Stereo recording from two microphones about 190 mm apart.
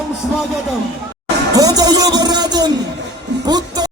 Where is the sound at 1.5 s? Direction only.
20° right (ahead or behind).